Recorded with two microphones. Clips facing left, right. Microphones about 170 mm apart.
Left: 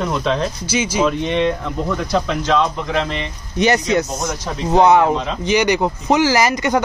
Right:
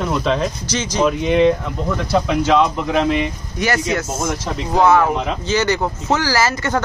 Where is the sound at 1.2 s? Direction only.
5° right (ahead or behind).